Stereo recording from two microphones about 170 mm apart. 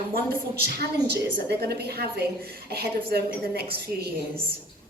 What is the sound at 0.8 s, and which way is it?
A woman's voice, 70° right (ahead or behind).